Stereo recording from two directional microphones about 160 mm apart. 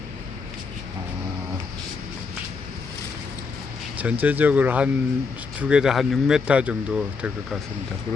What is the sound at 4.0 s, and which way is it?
Speech, 10° right (ahead or behind).